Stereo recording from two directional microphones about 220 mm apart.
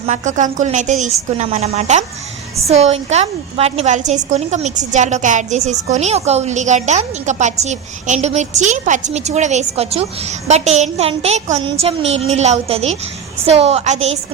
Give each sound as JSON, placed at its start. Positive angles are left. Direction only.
{"t": 0.0, "sound": "a woman's voice", "side_deg": -35}